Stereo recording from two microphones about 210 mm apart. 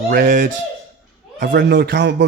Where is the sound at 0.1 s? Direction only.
40° right (ahead or behind).